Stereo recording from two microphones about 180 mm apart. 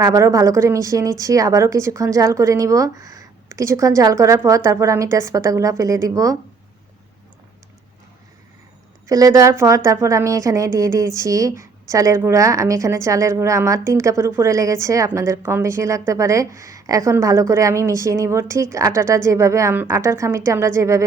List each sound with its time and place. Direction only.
0.0 s a woman's voice: 20° right (ahead or behind)
9.0 s a woman's voice: 20° right (ahead or behind)